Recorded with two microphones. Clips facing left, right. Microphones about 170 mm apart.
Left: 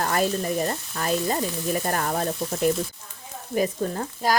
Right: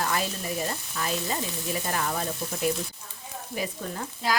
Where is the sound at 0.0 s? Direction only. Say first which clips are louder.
Left 6 dB; 45° left (ahead or behind).